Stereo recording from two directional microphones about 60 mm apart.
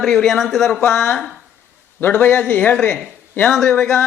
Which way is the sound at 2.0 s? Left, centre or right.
Left.